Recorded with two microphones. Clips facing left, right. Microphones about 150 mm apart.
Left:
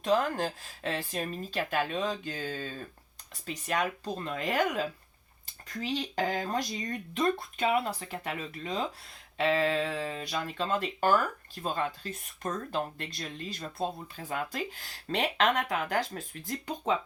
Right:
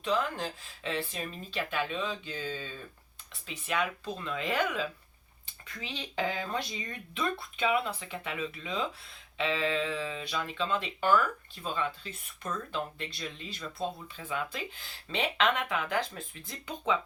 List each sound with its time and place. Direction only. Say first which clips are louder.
0.0 s speech: left 4 dB; 45° left (ahead or behind)